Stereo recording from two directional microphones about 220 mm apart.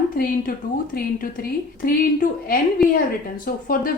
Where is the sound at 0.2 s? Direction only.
40° left (ahead or behind).